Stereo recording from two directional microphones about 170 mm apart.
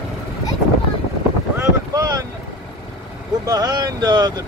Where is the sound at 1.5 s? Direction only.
20° right (ahead or behind).